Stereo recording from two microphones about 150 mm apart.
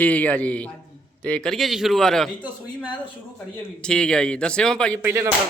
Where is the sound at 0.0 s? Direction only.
10° left (ahead or behind).